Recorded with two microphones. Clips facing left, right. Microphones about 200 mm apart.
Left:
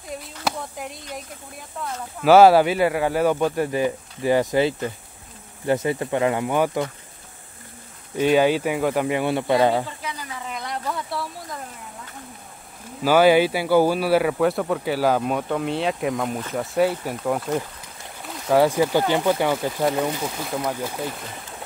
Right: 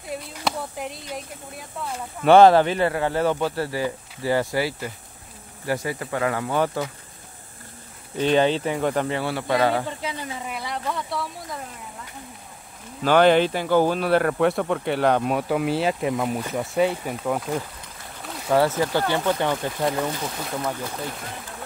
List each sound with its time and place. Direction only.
0.1 s speech: centre (ahead or behind)
8.2 s speech: 10° left (ahead or behind)
9.8 s speech: 25° right (ahead or behind)
10.5 s speech: 5° right (ahead or behind)
13.0 s speech: 5° left (ahead or behind)